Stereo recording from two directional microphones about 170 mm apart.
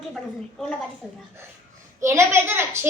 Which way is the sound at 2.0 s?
15° right (ahead or behind).